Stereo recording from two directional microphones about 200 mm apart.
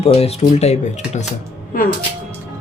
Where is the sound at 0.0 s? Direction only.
30° left (ahead or behind).